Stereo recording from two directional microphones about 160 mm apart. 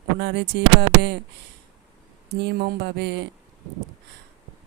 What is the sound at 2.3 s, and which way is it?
Speech, 90° right.